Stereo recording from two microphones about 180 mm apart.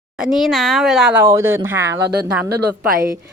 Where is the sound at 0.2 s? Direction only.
Centre (ahead or behind).